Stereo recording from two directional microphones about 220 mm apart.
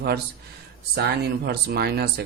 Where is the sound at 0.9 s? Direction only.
50° right (ahead or behind).